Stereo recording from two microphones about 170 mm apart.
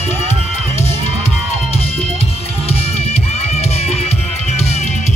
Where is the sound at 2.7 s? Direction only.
40° left (ahead or behind).